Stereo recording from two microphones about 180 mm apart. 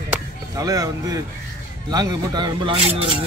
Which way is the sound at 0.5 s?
20° right (ahead or behind).